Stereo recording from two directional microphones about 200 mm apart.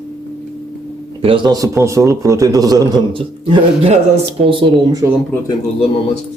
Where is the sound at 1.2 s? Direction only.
25° right (ahead or behind).